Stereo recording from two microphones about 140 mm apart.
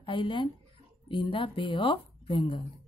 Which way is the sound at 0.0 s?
35° left (ahead or behind).